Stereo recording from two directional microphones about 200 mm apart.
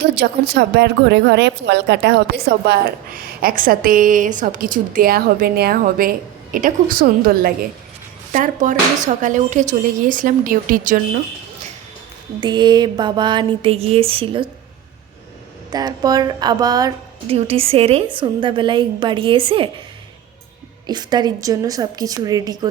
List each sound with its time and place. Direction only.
0.0 s a woman's voice: 55° right (ahead or behind)
12.4 s a woman's voice: 20° right (ahead or behind)
15.7 s a woman's voice: 20° right (ahead or behind)
17.3 s a woman's voice: 30° right (ahead or behind)
20.8 s a woman's voice: 20° right (ahead or behind)